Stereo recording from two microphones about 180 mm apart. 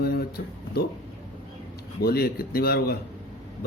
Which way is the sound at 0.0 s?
60° left (ahead or behind).